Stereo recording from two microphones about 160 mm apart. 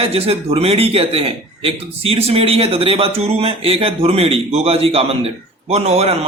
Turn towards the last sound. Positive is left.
turn(degrees=-40)  # may be behind; listen again after turning